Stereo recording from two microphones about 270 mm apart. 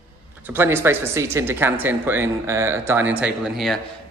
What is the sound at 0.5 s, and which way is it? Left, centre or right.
A man's voice, centre.